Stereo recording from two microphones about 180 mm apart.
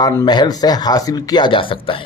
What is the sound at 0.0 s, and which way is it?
A man's voice, 20° left (ahead or behind).